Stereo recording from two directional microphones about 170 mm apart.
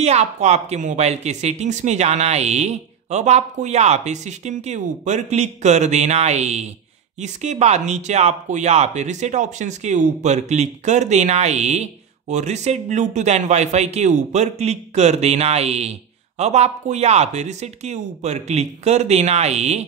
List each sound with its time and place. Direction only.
0.0 s speech: 40° right (ahead or behind)